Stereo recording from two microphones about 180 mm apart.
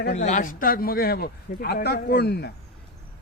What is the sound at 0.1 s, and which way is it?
Speech, 40° left (ahead or behind).